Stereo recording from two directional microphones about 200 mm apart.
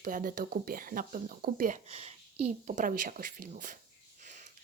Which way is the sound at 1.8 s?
30° right (ahead or behind).